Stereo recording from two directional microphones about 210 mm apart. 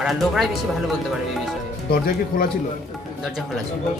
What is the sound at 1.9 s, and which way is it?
Speech, 45° left (ahead or behind).